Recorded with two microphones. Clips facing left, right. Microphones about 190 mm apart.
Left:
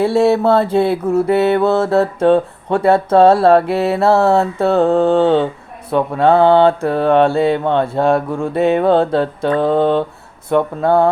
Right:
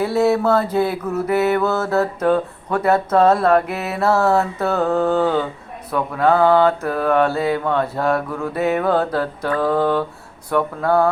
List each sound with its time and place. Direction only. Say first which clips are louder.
0.0 s mantra: left 4 dB; 30° left (ahead or behind)